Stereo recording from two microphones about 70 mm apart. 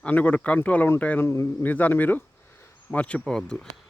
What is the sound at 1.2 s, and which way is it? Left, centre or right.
Speech, left.